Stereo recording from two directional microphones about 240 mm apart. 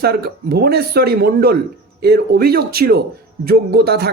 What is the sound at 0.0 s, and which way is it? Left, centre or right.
A man's voice, right.